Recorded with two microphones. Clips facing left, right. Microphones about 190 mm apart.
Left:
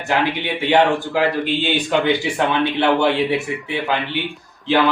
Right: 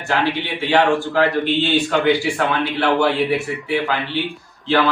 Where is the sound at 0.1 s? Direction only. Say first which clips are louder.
Even; 15° left (ahead or behind).